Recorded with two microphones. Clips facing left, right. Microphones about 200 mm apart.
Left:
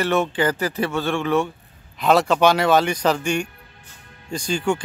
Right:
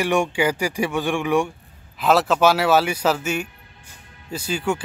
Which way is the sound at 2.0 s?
Centre (ahead or behind).